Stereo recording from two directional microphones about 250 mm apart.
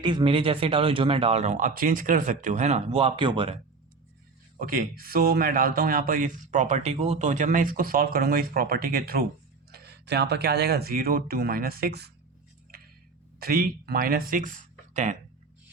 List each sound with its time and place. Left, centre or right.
0.0 s speech: centre
4.5 s speech: right
13.4 s speech: right